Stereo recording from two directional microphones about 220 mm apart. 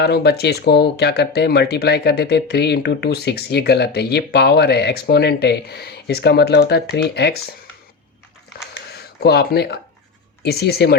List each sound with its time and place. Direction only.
0.0 s speech: 45° left (ahead or behind)
8.7 s a sound: 45° left (ahead or behind)
10.4 s speech: 45° left (ahead or behind)